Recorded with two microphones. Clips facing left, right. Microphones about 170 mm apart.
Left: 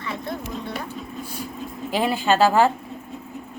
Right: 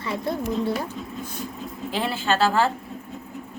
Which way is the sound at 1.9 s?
15° left (ahead or behind).